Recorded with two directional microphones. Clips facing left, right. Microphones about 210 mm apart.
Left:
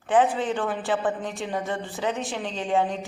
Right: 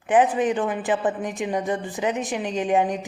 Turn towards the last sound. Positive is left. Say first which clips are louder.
# right 3 dB
turn(degrees=-15)  # may be behind; listen again after turning